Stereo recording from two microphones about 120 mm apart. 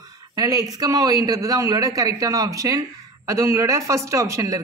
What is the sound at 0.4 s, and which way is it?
Speech, 30° right (ahead or behind).